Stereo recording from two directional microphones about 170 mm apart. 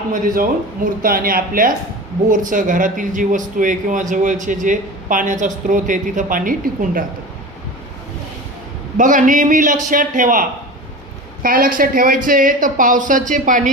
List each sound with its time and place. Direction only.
1.0 s a man's voice: 55° right (ahead or behind)
9.0 s a man's voice: 50° right (ahead or behind)
11.4 s a man's voice: 55° right (ahead or behind)